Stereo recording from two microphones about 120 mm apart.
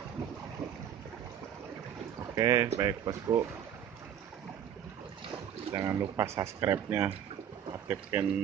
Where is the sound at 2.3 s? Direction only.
25° right (ahead or behind).